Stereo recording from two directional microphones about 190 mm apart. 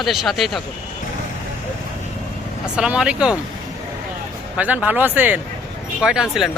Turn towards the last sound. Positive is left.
turn(degrees=-5)  # may be behind; listen again after turning